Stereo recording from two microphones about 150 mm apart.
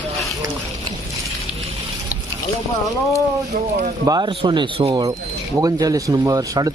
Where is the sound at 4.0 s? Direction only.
25° right (ahead or behind).